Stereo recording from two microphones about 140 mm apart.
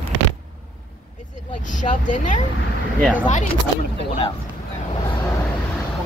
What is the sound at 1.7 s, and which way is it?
Speech, 65° left (ahead or behind).